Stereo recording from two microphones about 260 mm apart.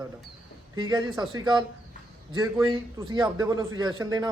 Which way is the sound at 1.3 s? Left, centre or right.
Centre.